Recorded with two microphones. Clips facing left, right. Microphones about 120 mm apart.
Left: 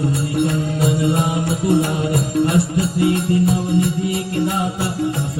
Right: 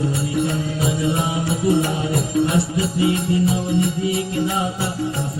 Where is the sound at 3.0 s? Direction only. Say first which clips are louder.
Left 2 dB; 45° left (ahead or behind).